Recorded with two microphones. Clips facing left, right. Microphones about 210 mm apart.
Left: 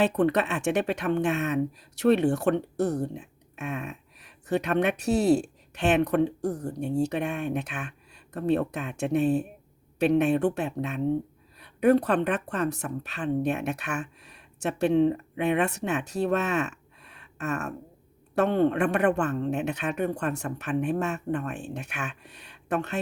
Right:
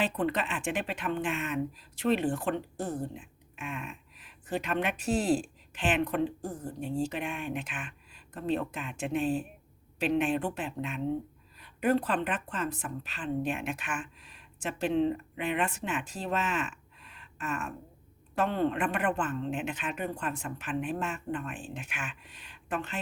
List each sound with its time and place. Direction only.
0.0 s speech: 70° left (ahead or behind)
15.4 s speech: 65° left (ahead or behind)